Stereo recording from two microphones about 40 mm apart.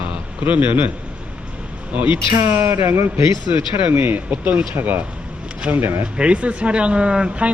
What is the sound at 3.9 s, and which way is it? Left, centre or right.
Speech, right.